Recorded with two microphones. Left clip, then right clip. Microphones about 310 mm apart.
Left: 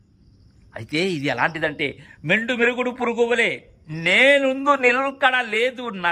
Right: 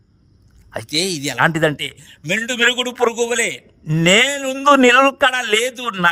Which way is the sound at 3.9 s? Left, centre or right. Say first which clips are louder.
Right 4 dB; right.